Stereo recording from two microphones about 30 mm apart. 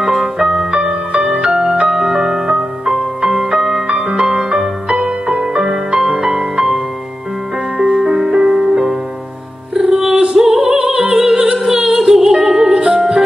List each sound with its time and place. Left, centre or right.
0.0 s music: centre
0.7 s music: right
3.4 s music: centre
4.0 s music: right
7.7 s music: centre
10.4 s opera: right
12.2 s music: centre